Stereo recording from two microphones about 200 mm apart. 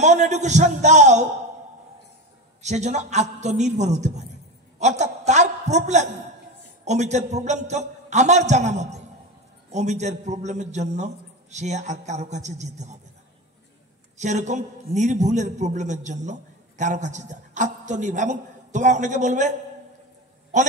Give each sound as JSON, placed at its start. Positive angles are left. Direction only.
{"t": 0.0, "sound": "a man's voice", "side_deg": -35}
{"t": 2.6, "sound": "a man's voice", "side_deg": -35}
{"t": 14.1, "sound": "a man's voice", "side_deg": -35}